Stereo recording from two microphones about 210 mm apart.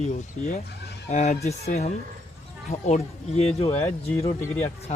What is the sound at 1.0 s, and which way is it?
Speech, 35° left (ahead or behind).